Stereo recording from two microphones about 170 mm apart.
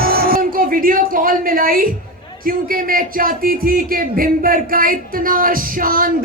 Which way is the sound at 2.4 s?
55° right (ahead or behind).